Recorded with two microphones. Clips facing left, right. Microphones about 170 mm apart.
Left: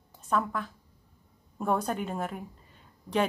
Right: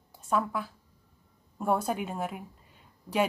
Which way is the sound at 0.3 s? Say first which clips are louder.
Even; 10° right (ahead or behind).